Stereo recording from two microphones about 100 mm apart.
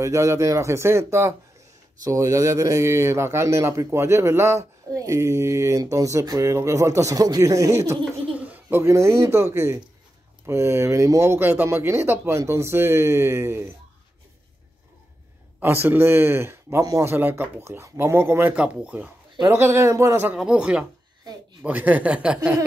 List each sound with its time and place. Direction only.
0.0 s a man's voice: 30° right (ahead or behind)
8.3 s speech: 15° right (ahead or behind)
15.6 s speech: 20° right (ahead or behind)
18.5 s speech: 10° right (ahead or behind)
19.4 s speech: 25° right (ahead or behind)
20.3 s speech: 10° right (ahead or behind)